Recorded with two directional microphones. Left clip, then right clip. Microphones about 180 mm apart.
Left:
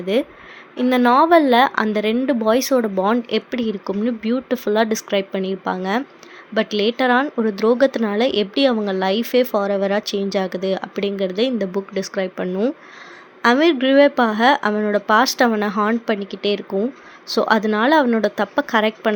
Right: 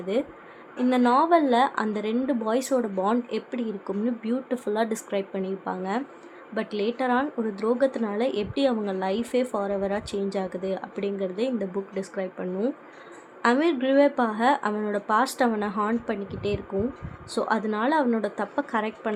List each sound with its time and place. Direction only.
0.1 s a woman's voice: 30° left (ahead or behind)